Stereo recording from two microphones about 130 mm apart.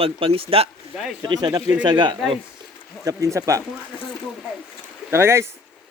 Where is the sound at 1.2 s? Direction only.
35° right (ahead or behind).